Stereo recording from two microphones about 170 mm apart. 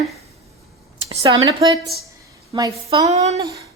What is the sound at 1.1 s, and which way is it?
Speech, 30° right (ahead or behind).